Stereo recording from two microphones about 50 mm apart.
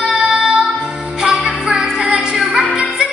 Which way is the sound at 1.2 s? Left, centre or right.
Centre.